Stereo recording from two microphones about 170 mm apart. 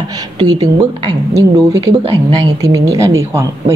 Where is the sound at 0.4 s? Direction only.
25° right (ahead or behind).